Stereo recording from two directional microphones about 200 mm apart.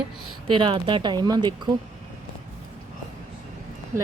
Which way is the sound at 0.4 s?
25° right (ahead or behind).